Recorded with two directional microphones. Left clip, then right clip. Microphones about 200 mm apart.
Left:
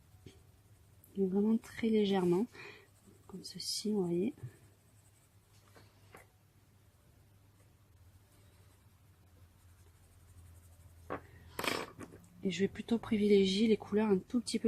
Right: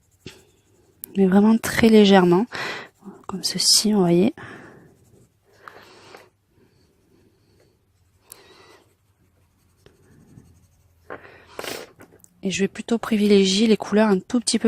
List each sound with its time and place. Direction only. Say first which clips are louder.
1.3 s speech: right 16 dB; 50° right (ahead or behind)
12.4 s speech: right 11 dB; 35° right (ahead or behind)